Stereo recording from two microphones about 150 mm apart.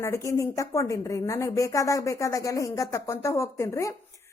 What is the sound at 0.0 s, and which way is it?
A woman's voice, 20° left (ahead or behind).